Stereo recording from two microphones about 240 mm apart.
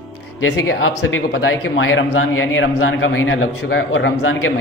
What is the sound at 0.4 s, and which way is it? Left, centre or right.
A man's voice, left.